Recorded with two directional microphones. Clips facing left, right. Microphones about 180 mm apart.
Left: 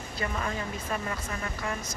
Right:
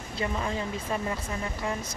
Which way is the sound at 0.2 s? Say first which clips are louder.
Right 2 dB; 20° right (ahead or behind).